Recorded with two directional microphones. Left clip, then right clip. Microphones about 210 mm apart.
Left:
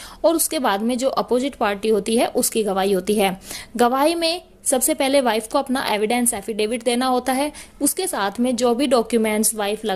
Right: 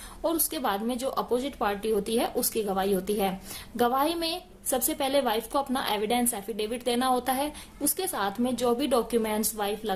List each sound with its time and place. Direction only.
0.2 s a woman's voice: 35° left (ahead or behind)